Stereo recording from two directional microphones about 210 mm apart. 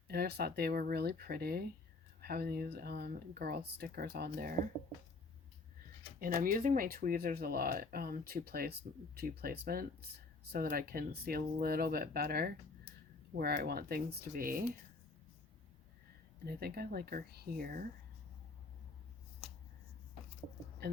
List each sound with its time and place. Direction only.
0.1 s speech: 50° right (ahead or behind)
6.1 s speech: 40° right (ahead or behind)
16.5 s speech: 50° right (ahead or behind)
20.8 s a sound: 50° right (ahead or behind)